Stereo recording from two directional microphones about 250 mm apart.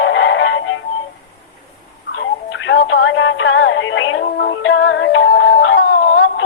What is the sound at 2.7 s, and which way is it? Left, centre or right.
Music, left.